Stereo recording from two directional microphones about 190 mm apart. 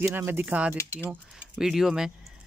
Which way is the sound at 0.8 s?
15° left (ahead or behind).